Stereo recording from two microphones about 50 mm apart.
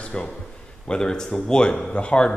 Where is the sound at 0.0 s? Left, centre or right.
Left.